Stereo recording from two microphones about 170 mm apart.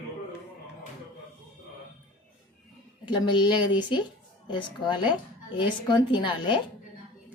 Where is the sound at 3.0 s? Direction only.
25° left (ahead or behind).